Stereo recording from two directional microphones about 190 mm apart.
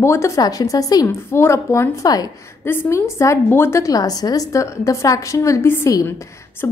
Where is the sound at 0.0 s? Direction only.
15° left (ahead or behind).